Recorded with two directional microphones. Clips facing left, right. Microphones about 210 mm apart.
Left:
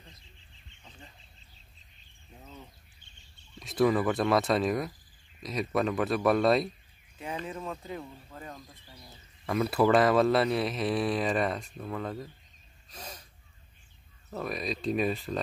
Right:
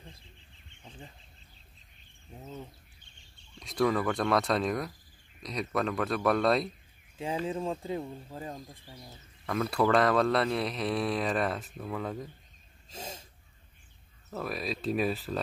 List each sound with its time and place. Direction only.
3.5 s speech: 5° left (ahead or behind)
7.4 s speech: 30° right (ahead or behind)
9.5 s speech: 5° left (ahead or behind)
12.9 s a sound: 25° right (ahead or behind)
14.3 s speech: 5° right (ahead or behind)